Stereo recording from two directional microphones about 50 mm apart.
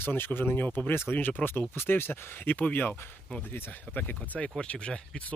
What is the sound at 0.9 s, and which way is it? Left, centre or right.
Speech, left.